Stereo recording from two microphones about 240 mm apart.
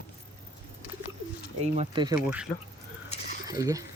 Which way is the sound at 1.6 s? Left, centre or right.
Right.